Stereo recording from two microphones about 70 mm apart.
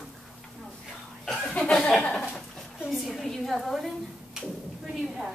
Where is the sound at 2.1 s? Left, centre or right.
Centre.